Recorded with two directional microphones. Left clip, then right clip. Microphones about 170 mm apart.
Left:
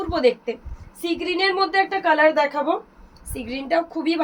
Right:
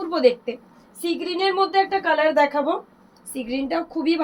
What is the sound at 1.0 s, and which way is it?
A woman's voice, 20° left (ahead or behind).